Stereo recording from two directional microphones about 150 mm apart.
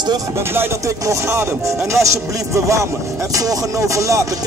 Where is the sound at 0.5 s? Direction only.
15° right (ahead or behind).